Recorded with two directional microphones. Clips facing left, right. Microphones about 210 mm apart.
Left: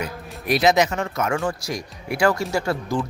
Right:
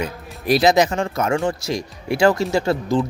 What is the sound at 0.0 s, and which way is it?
Speech, 30° right (ahead or behind).